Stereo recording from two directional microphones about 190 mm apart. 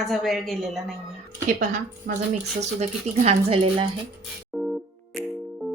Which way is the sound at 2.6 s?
35° right (ahead or behind).